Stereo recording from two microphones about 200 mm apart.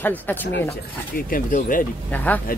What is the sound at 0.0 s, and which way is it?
Speech, 10° left (ahead or behind).